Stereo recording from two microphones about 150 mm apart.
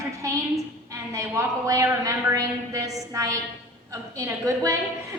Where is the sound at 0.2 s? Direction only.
20° right (ahead or behind).